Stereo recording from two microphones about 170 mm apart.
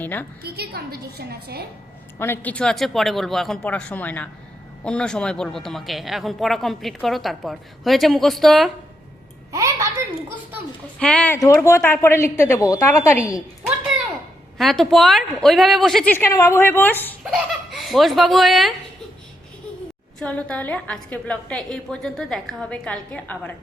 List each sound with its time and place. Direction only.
0.0 s a woman's voice: 10° left (ahead or behind)
0.4 s a woman's voice: 70° right (ahead or behind)
2.1 s a man's voice: 15° left (ahead or behind)
9.5 s a child's voice: 20° right (ahead or behind)
11.0 s a woman's voice: 5° left (ahead or behind)
11.3 s a woman's voice: 15° left (ahead or behind)
14.6 s a man's voice: centre (ahead or behind)
16.1 s a woman's voice: 15° left (ahead or behind)
17.7 s speech: centre (ahead or behind)
20.1 s a woman's voice: 5° left (ahead or behind)